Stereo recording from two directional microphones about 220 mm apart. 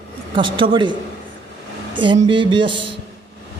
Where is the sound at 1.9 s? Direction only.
20° right (ahead or behind).